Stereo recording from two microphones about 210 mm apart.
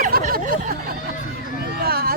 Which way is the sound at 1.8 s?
45° right (ahead or behind).